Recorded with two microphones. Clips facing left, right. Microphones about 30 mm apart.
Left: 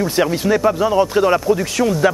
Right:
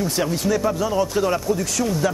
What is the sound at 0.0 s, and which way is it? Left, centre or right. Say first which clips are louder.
Speech: left 5 dB; left.